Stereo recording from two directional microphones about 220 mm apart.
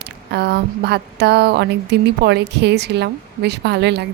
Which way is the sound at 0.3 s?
50° right (ahead or behind).